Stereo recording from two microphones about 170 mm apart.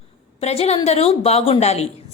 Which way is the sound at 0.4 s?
35° left (ahead or behind).